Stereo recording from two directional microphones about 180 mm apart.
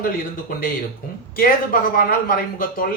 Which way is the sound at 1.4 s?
55° left (ahead or behind).